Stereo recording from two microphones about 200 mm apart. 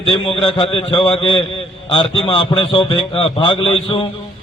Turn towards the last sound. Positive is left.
turn(degrees=25)  # may be behind; listen again after turning